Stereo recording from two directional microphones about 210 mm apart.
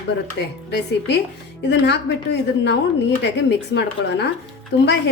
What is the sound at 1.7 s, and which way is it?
A woman's voice, 55° left (ahead or behind).